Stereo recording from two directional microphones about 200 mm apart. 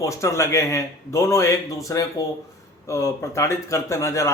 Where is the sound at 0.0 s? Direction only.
15° left (ahead or behind).